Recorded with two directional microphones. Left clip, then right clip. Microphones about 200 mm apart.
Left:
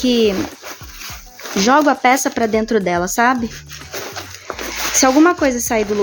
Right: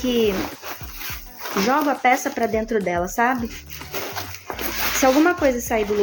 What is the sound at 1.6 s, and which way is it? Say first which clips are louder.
Speech: left 6 dB; 55° left (ahead or behind).